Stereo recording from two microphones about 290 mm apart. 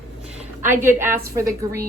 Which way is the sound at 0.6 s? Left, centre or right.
Centre.